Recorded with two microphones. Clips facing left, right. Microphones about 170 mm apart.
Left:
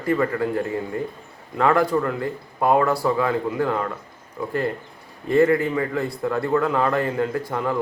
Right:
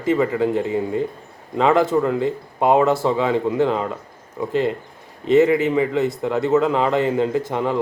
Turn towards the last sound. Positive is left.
turn(degrees=-20)  # may be behind; listen again after turning